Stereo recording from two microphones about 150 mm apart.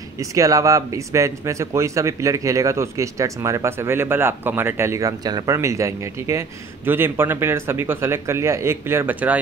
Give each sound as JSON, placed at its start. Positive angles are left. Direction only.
{"t": 0.2, "sound": "speech", "side_deg": -20}